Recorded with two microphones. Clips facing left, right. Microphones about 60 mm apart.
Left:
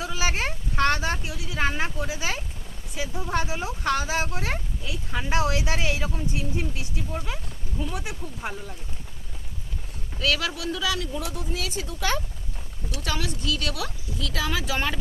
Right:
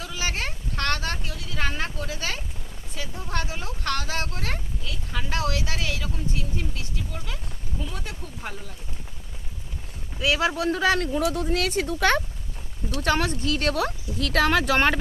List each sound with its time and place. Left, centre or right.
0.0 s speech: centre
10.2 s speech: right
10.5 s speech: right